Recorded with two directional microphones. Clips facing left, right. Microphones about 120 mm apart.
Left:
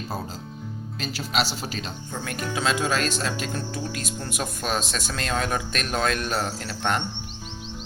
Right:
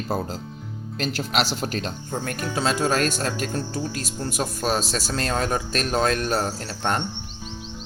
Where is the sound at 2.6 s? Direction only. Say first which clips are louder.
Right 3 dB; 40° right (ahead or behind).